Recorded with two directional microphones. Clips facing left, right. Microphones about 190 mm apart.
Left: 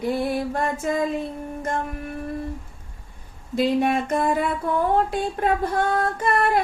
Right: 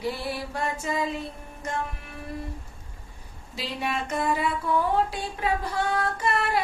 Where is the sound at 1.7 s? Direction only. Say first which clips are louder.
Left 4 dB; 50° left (ahead or behind).